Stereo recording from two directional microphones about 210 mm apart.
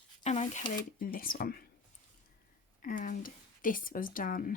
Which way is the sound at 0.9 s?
40° left (ahead or behind).